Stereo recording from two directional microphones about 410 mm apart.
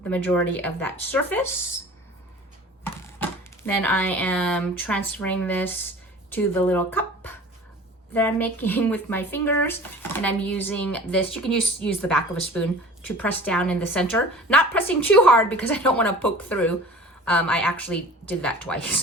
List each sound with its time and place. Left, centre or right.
0.0 s speech: centre
2.8 s speech: centre